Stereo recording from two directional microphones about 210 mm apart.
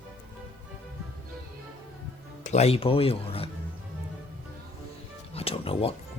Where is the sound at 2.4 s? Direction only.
30° left (ahead or behind).